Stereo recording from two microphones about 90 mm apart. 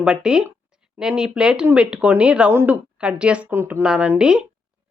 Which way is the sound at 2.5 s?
25° right (ahead or behind).